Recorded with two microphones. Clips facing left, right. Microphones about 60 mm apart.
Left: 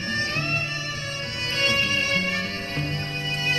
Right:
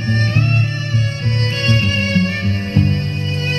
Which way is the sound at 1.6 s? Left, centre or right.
Right.